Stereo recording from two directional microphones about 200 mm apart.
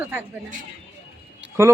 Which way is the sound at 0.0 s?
10° right (ahead or behind).